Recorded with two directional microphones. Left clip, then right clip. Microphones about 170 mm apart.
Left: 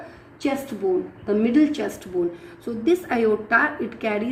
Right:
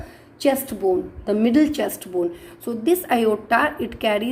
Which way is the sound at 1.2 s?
35° right (ahead or behind).